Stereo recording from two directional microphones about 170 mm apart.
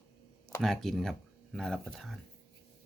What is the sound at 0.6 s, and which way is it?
Speech, centre (ahead or behind).